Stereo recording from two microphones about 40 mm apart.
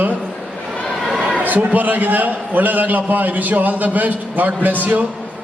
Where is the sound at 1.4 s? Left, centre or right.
Right.